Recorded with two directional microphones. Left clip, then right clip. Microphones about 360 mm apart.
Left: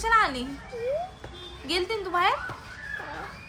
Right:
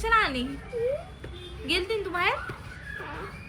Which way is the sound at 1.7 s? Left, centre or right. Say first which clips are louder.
Even; centre.